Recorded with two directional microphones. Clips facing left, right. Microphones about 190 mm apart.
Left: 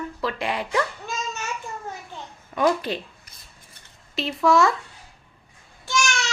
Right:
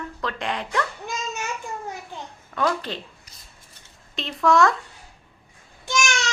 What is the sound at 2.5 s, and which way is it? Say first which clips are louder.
Speech: left 3 dB; 10° left (ahead or behind).